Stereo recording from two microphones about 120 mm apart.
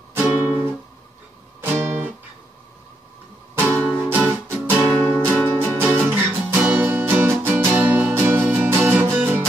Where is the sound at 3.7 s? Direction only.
10° left (ahead or behind).